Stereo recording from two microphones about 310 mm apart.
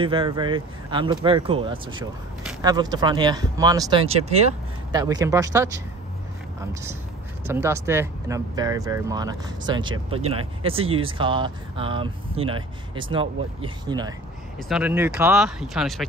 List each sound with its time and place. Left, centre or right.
0.0 s speech: centre